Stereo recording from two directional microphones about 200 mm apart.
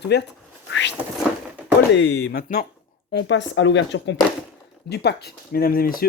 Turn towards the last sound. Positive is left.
turn(degrees=45)  # may be behind; listen again after turning